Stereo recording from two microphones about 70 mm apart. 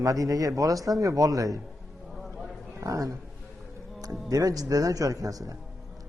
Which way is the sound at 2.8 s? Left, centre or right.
Right.